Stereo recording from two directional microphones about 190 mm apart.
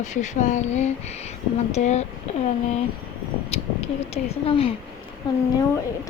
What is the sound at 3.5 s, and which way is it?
A woman's voice, 30° left (ahead or behind).